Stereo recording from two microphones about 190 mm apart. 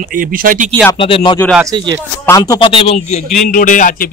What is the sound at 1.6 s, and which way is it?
Speech, 20° right (ahead or behind).